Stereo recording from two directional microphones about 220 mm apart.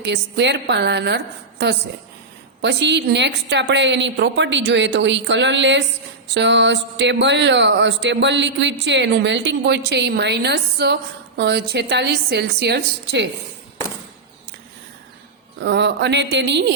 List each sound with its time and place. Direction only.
0.0 s speech: 50° right (ahead or behind)
15.5 s speech: 50° right (ahead or behind)